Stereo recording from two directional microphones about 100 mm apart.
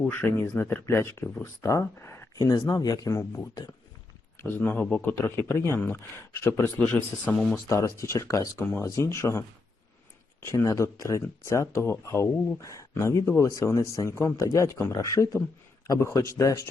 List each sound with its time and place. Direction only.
0.1 s speech: 20° left (ahead or behind)
2.5 s speech: 40° left (ahead or behind); by 7.3 s 15° left (ahead or behind)
7.7 s speech: 30° left (ahead or behind)
10.4 s speech: 30° left (ahead or behind)